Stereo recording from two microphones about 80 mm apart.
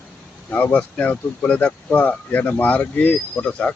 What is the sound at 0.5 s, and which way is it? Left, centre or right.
Speech, left.